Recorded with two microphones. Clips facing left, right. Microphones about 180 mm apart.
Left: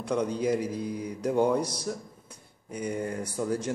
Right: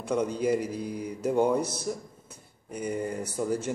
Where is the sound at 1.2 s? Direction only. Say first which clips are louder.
Even; 10° right (ahead or behind).